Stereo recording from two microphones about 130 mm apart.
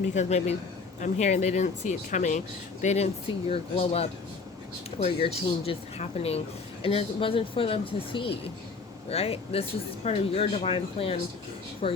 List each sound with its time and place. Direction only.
0.1 s speech: 60° left (ahead or behind)
2.8 s speech: 60° left (ahead or behind)
3.5 s speech: 50° left (ahead or behind)